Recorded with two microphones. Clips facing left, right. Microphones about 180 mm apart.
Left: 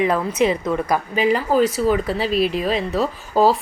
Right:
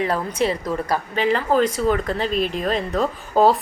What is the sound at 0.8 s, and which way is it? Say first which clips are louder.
Speech: left 1 dB; 10° left (ahead or behind).